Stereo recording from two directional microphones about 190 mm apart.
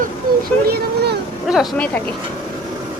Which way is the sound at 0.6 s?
55° right (ahead or behind).